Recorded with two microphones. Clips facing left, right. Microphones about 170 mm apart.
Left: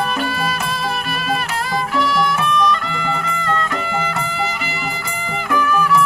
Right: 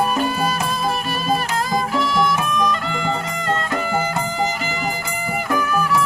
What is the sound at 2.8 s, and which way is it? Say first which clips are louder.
Music: even; 35° right (ahead or behind).